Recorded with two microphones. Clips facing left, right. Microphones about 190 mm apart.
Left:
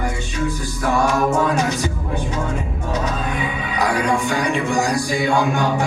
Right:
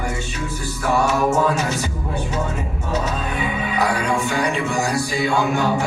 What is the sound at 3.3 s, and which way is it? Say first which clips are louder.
Music: right 1 dB; 15° left (ahead or behind).